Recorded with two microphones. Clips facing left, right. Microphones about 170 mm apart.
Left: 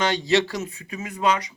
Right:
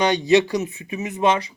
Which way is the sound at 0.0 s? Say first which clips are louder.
Right 4 dB; 15° right (ahead or behind).